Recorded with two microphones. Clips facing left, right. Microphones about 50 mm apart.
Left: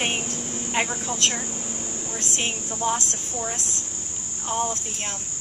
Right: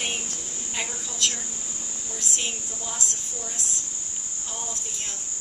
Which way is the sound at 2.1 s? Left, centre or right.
Left.